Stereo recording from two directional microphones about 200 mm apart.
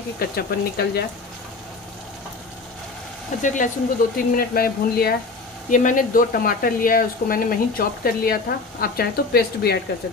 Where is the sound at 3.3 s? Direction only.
35° left (ahead or behind).